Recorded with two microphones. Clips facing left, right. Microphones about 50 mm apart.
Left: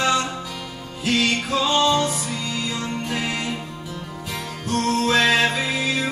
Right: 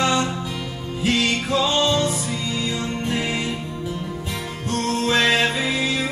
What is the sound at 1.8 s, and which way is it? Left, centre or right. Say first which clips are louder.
Music: left 1 dB; left.